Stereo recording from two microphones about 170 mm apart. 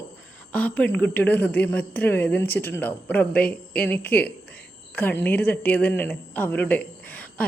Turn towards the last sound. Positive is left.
turn(degrees=10)  # may be behind; listen again after turning